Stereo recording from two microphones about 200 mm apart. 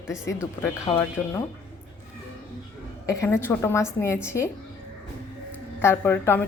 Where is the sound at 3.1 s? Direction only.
15° left (ahead or behind).